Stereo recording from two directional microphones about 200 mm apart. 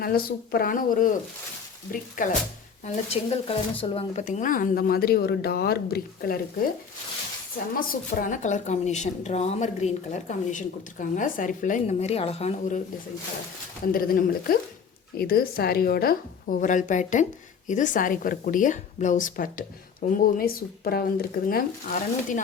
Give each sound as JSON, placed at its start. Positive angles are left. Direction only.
{"t": 0.0, "sound": "speech", "side_deg": 50}
{"t": 2.8, "sound": "speech", "side_deg": 30}
{"t": 7.8, "sound": "speech", "side_deg": 45}
{"t": 13.8, "sound": "speech", "side_deg": 45}